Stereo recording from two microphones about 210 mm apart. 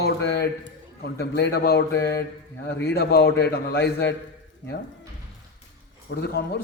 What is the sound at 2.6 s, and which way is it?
A man's voice, 50° left (ahead or behind).